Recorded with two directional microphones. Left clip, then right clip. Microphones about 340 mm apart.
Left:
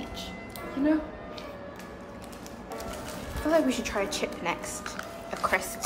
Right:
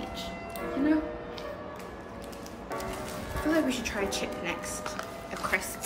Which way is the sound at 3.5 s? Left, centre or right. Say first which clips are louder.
Left 4 dB; centre.